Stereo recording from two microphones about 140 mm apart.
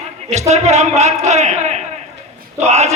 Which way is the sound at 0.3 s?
55° right (ahead or behind).